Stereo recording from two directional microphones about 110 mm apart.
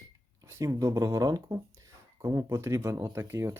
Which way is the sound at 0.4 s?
25° right (ahead or behind).